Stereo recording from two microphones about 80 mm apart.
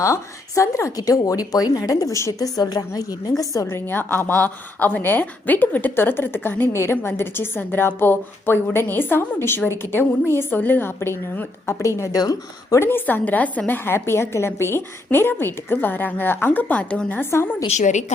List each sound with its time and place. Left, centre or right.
0.0 s speech: left
2.6 s a woman's voice: left
12.1 s speech: left
12.8 s a woman's voice: left